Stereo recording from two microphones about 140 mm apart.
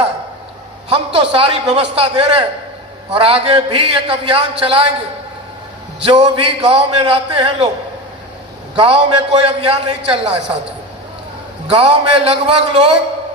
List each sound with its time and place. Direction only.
0.9 s a man's voice: 45° right (ahead or behind)
6.0 s a man's voice: 40° right (ahead or behind)
8.7 s a man's voice: 45° right (ahead or behind)
11.7 s a man's voice: 45° right (ahead or behind)